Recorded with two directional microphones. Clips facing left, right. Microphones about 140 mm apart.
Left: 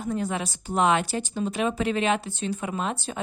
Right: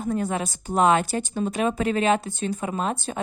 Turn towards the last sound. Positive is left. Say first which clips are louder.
# right 2 dB
turn(degrees=-45)  # may be behind; listen again after turning